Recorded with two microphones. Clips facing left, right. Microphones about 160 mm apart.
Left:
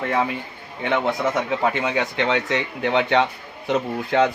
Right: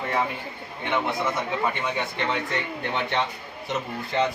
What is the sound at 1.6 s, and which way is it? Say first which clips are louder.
A man's voice: left 5 dB; 90° left.